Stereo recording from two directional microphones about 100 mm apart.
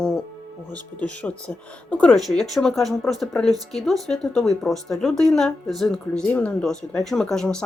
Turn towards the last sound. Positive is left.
turn(degrees=5)  # may be behind; listen again after turning